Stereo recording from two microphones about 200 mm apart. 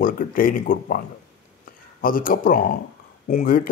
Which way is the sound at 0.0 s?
45° left (ahead or behind).